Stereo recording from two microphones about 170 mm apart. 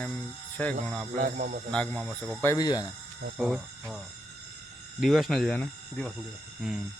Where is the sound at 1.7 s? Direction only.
5° left (ahead or behind).